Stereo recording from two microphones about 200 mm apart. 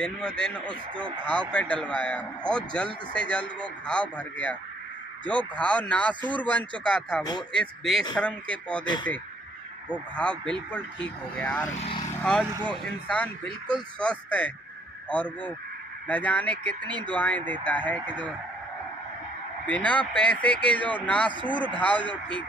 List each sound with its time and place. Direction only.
0.0 s speech: 5° left (ahead or behind)
10.1 s speech: 5° left (ahead or behind)
16.8 s speech: 20° right (ahead or behind)
17.1 s speech: 10° left (ahead or behind)
19.6 s speech: 5° left (ahead or behind)